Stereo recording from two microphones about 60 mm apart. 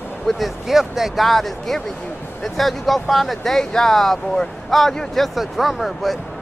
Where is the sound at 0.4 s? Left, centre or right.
Centre.